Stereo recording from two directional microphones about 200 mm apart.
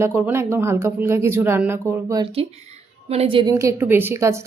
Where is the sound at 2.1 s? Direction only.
25° right (ahead or behind).